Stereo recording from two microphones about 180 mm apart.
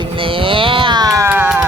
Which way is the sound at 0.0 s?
30° right (ahead or behind).